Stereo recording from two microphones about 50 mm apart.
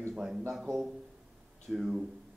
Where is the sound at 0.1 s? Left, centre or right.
Centre.